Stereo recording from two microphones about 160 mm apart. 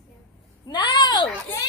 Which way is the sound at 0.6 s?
30° left (ahead or behind).